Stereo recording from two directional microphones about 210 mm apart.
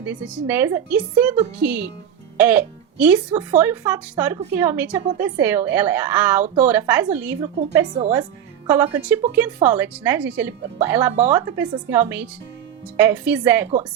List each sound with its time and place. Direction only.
0.0 s speech: 5° right (ahead or behind)